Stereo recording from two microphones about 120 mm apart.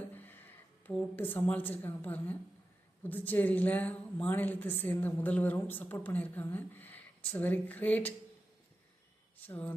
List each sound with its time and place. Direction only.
0.1 s a woman's voice: 15° left (ahead or behind)
9.4 s a woman's voice: 15° left (ahead or behind)